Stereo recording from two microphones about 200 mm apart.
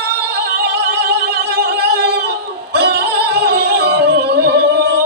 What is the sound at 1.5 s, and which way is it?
Music, 50° right (ahead or behind).